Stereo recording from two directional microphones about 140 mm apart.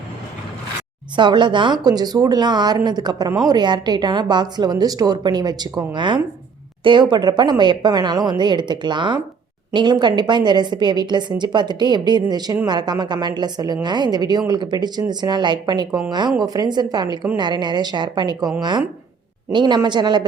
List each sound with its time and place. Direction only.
1.1 s a woman's voice: 35° right (ahead or behind)